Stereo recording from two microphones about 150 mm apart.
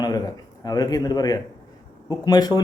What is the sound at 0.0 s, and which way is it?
A man's voice, 25° left (ahead or behind).